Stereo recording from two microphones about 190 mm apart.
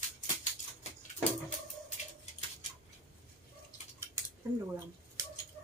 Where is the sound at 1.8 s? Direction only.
35° left (ahead or behind).